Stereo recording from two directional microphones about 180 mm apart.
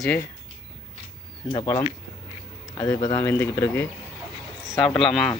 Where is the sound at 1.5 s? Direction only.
30° left (ahead or behind).